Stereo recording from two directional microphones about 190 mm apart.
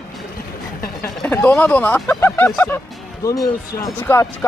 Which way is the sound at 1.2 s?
10° left (ahead or behind).